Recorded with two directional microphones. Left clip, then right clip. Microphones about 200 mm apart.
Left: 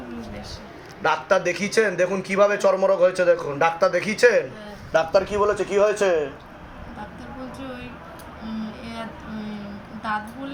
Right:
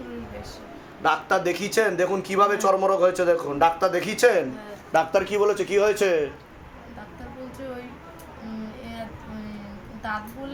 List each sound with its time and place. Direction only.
1.0 s a man's voice: centre (ahead or behind)
4.9 s a man's voice: 40° right (ahead or behind)